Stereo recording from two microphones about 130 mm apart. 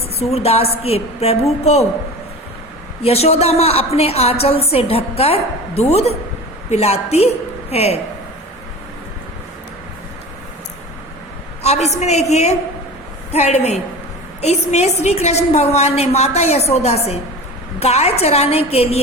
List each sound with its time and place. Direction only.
0.2 s a woman's voice: 55° left (ahead or behind)
3.0 s a woman's voice: 50° left (ahead or behind)
11.6 s a woman's voice: 55° left (ahead or behind)